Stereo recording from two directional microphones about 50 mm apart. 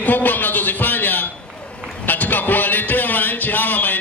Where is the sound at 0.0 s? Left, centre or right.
Left.